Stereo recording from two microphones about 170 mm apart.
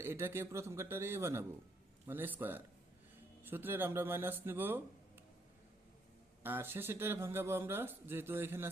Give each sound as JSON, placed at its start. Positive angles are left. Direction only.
{"t": 0.0, "sound": "speech", "side_deg": -15}
{"t": 6.4, "sound": "speech", "side_deg": -10}